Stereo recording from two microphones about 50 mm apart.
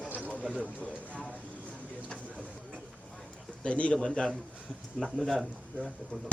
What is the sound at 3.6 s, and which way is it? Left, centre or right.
Speech, left.